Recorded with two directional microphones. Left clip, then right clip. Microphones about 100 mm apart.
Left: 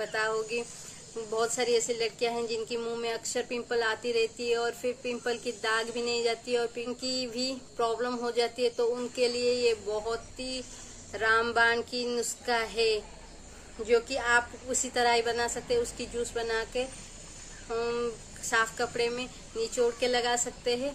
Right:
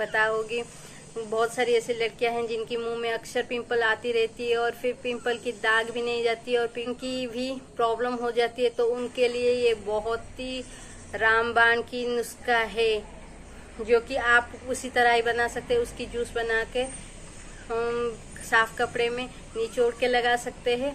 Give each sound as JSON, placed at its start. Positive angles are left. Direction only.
{"t": 0.0, "sound": "speech", "side_deg": 45}